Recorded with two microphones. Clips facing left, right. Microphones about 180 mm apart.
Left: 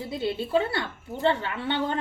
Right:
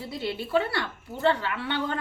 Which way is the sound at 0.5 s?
25° left (ahead or behind).